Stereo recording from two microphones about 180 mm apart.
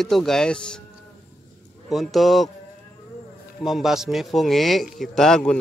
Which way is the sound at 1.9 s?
Centre (ahead or behind).